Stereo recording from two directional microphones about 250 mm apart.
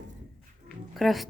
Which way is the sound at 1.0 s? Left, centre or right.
Centre.